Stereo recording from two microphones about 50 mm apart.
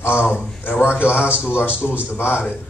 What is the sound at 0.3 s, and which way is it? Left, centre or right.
Speech, left.